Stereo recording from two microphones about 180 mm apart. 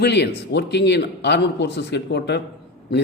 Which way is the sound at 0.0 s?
65° left (ahead or behind).